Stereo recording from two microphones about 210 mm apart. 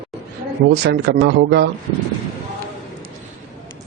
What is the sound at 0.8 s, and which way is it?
Speech, 55° right (ahead or behind).